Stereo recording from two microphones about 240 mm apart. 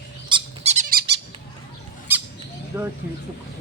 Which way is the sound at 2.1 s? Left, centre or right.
Centre.